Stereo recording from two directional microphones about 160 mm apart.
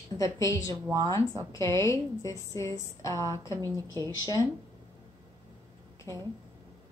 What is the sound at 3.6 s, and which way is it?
Speech, 20° right (ahead or behind).